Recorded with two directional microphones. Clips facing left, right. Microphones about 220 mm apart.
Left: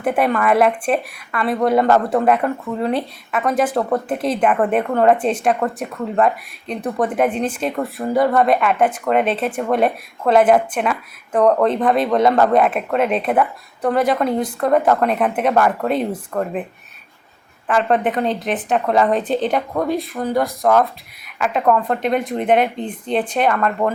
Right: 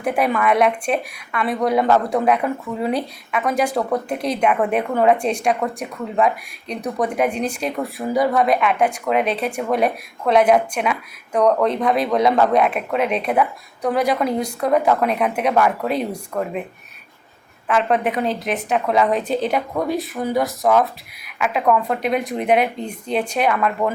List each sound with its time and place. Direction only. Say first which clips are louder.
0.0 s speech: left 2 dB; centre (ahead or behind)
17.7 s speech: left 1 dB; centre (ahead or behind)